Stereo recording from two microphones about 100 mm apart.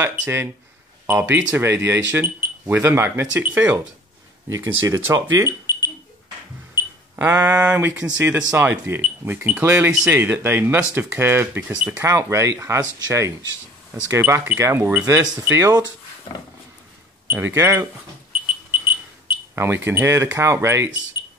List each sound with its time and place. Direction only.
0.0 s speech: 20° right (ahead or behind)
6.7 s speech: 20° right (ahead or behind)
14.2 s speech: 15° right (ahead or behind)
17.3 s speech: 20° right (ahead or behind)
19.5 s speech: 25° right (ahead or behind)